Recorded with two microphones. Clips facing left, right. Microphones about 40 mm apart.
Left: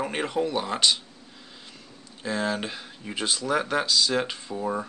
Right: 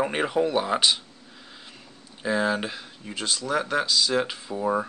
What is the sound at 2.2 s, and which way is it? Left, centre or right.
Speech, centre.